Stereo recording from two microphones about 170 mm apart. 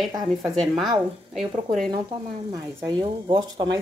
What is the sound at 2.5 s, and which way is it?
Speech, 25° right (ahead or behind).